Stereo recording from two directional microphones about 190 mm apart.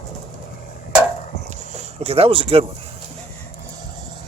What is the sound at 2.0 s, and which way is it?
Speech, 30° right (ahead or behind).